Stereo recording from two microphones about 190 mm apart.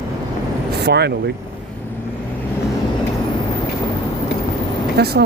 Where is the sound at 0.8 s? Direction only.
60° right (ahead or behind).